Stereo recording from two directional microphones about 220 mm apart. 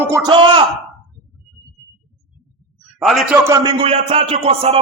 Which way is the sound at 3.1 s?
10° right (ahead or behind).